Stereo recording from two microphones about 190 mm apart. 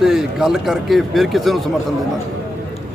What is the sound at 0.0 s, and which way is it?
Speech, centre (ahead or behind).